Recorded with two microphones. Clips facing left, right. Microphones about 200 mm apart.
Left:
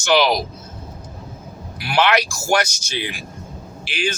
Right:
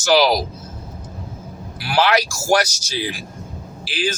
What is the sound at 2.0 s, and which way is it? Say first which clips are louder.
Speech: even; 35° right (ahead or behind).